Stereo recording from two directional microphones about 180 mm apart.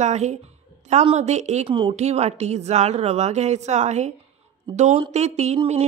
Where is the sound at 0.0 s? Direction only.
40° right (ahead or behind).